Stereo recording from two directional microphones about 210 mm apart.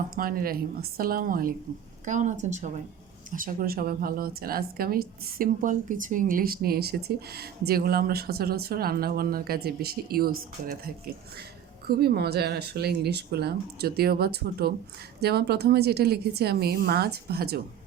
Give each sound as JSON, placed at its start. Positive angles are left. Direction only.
{"t": 0.2, "sound": "a woman's voice", "side_deg": -45}